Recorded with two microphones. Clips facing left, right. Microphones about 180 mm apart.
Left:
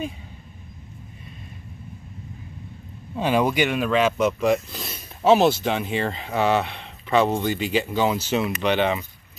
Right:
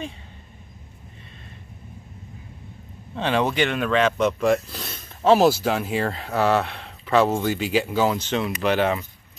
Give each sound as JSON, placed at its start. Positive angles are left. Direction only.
{"t": 3.2, "sound": "speech", "side_deg": 10}